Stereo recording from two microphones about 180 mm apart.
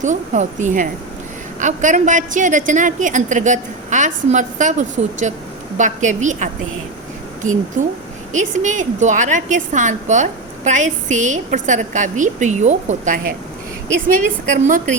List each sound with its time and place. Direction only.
0.0 s a woman's voice: 40° right (ahead or behind)
7.8 s a woman's voice: 45° right (ahead or behind)
14.5 s a woman's voice: 45° right (ahead or behind)